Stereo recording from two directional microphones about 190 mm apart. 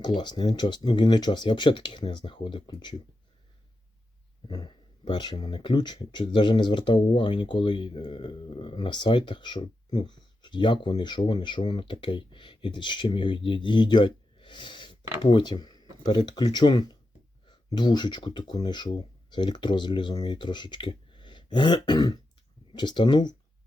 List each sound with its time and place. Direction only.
0.0 s speech: 25° left (ahead or behind)
4.4 s speech: 20° left (ahead or behind)